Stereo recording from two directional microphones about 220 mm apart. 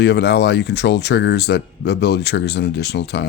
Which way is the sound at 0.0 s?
50° left (ahead or behind).